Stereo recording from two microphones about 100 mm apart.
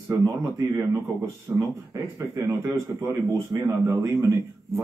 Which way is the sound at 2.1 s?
35° right (ahead or behind).